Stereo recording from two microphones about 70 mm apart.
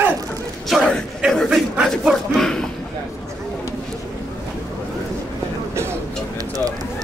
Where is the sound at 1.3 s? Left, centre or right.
Centre.